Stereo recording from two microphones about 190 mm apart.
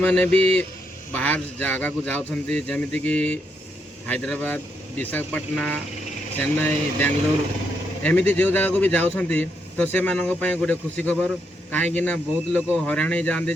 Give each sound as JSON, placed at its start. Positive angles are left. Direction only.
{"t": 0.0, "sound": "a man's voice", "side_deg": 5}